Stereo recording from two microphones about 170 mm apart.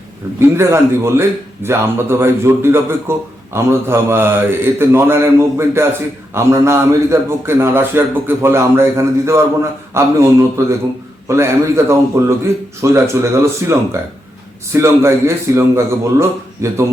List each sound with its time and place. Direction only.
0.3 s a man's voice: 15° right (ahead or behind)